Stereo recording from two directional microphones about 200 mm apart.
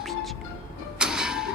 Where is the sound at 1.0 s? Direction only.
5° right (ahead or behind).